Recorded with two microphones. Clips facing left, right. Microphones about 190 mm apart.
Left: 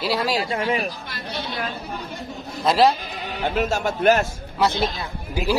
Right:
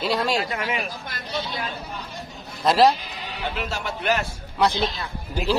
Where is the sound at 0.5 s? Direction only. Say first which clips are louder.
Left 5 dB; 35° left (ahead or behind).